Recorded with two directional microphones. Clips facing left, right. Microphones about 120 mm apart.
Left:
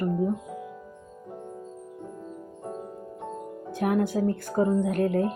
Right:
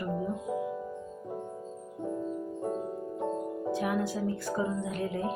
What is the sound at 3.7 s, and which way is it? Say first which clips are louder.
Speech: left 8 dB; 50° left (ahead or behind).